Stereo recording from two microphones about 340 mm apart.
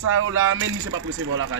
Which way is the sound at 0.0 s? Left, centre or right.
Right.